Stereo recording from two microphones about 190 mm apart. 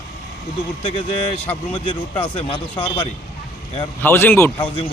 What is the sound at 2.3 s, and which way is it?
Speech, 25° left (ahead or behind).